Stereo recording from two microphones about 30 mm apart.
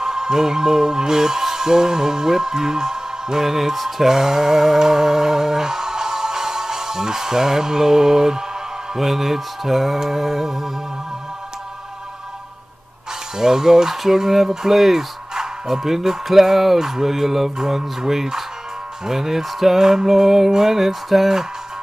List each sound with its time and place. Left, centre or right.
0.0 s speech: centre
3.7 s mantra: centre
4.1 s music: centre
13.4 s music: centre
14.5 s speech: centre
16.3 s music: centre